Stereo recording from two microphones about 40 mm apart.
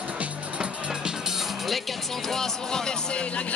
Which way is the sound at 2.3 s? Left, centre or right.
Centre.